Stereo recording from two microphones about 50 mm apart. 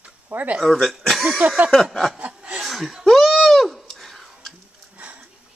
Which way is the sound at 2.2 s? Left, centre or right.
Right.